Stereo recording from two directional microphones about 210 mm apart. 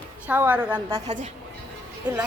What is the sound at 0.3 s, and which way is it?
Speech, 10° right (ahead or behind).